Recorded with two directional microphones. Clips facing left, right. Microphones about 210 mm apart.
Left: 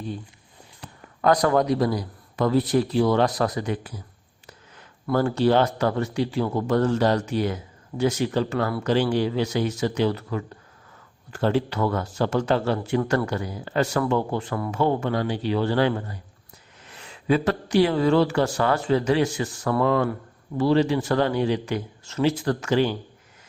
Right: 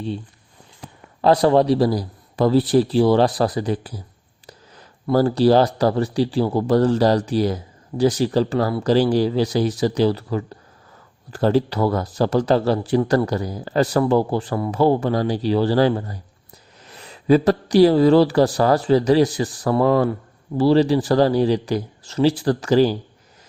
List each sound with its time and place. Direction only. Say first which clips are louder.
1.2 s speech: right 5 dB; 30° right (ahead or behind)